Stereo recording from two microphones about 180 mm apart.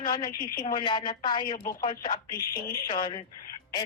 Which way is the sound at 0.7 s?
25° left (ahead or behind).